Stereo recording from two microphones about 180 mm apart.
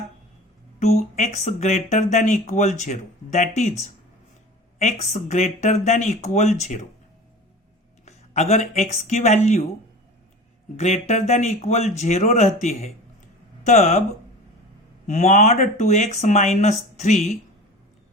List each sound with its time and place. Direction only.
0.8 s speech: 40° left (ahead or behind)
8.0 s speech: 35° left (ahead or behind)
10.8 s speech: 40° left (ahead or behind)
15.0 s speech: 40° left (ahead or behind)